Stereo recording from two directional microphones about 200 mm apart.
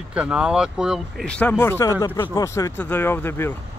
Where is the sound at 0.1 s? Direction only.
5° right (ahead or behind); by 3.5 s 10° left (ahead or behind).